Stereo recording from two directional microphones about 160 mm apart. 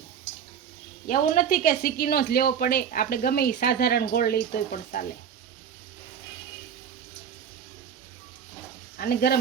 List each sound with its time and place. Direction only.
1.0 s speech: 55° left (ahead or behind)
9.0 s speech: 75° left (ahead or behind)